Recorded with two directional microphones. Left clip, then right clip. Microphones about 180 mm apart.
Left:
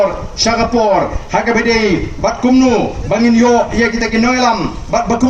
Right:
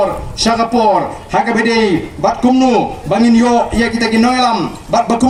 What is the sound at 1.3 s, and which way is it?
A man's voice, 70° right (ahead or behind).